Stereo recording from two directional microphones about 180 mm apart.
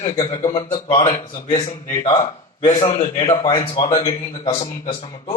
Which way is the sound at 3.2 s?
20° left (ahead or behind).